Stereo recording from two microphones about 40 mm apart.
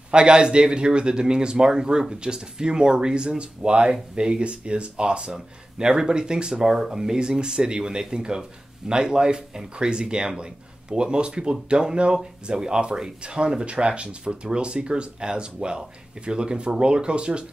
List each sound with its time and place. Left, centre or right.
0.1 s speech: right